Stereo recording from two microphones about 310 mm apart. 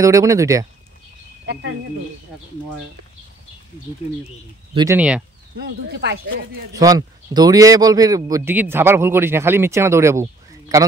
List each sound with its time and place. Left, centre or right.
0.0 s a man's voice: centre
1.4 s a sound: right
4.7 s speech: centre
5.9 s speech: right
6.7 s a man's voice: centre